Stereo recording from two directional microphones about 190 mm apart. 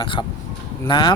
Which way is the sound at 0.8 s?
25° left (ahead or behind).